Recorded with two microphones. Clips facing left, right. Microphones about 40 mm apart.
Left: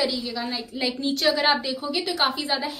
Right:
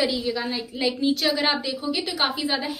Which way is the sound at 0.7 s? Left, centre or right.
Centre.